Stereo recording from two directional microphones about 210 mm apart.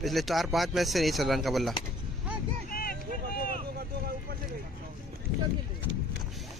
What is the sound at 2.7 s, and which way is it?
Vehicle, 45° left (ahead or behind).